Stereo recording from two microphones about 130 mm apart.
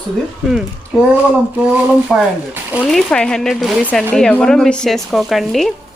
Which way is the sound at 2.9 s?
5° left (ahead or behind).